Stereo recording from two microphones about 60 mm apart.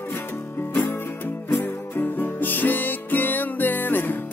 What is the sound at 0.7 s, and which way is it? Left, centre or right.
Music, left.